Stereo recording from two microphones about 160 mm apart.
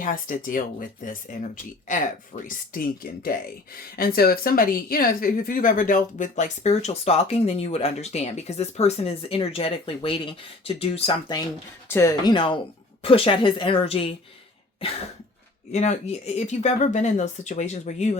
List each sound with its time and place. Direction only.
0.0 s speech: 60° left (ahead or behind); by 11.4 s 30° left (ahead or behind)
11.9 s speech: 15° left (ahead or behind); by 14.2 s 40° left (ahead or behind)
15.7 s speech: 45° left (ahead or behind)